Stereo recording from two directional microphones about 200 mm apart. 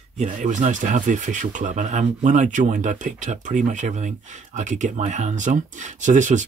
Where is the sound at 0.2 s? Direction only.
40° right (ahead or behind).